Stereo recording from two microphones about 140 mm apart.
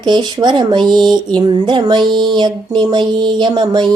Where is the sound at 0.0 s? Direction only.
30° right (ahead or behind).